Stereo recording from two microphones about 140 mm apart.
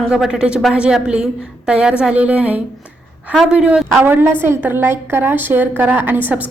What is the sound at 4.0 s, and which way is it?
A woman's voice, 15° right (ahead or behind).